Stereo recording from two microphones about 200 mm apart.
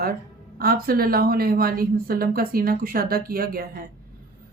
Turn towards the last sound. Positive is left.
turn(degrees=-50)  # may be behind; listen again after turning